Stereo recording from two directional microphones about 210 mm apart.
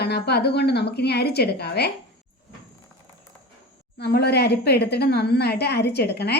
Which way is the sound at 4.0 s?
50° left (ahead or behind).